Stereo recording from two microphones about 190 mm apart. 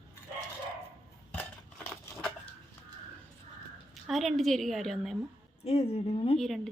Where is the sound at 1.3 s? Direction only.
5° left (ahead or behind).